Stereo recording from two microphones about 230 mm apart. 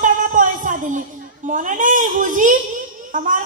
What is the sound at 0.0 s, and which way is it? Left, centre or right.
Music, right.